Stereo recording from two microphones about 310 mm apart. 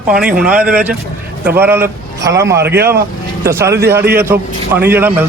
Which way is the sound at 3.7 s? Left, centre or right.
Right.